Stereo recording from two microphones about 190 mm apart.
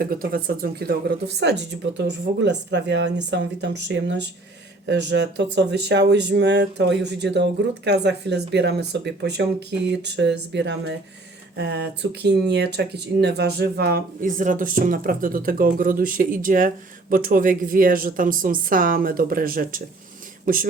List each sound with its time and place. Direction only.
0.0 s speech: 50° right (ahead or behind)